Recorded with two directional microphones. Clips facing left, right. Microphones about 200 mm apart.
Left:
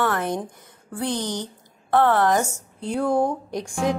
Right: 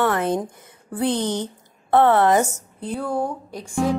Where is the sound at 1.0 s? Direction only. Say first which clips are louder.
Right 4 dB; 60° right (ahead or behind).